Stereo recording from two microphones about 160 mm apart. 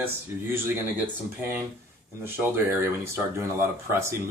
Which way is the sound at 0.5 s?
15° right (ahead or behind).